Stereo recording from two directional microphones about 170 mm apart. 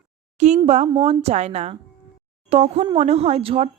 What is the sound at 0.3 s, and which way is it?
A woman's voice, 45° right (ahead or behind).